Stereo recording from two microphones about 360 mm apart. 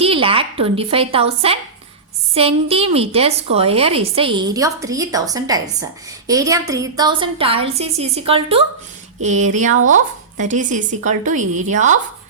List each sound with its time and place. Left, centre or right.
0.0 s a woman's voice: centre